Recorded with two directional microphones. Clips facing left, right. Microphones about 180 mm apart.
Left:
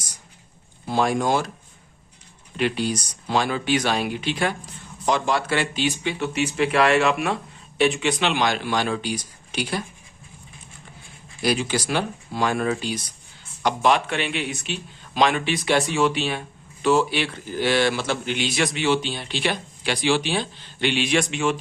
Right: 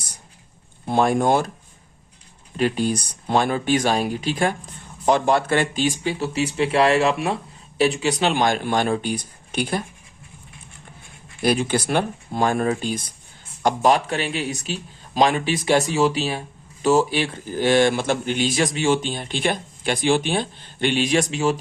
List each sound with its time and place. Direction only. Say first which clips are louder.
0.9 s speech: right 3 dB; 55° right (ahead or behind)
2.6 s speech: right 2 dB; 40° right (ahead or behind)
11.4 s speech: right 3 dB; 55° right (ahead or behind); by 21.6 s 35° right (ahead or behind)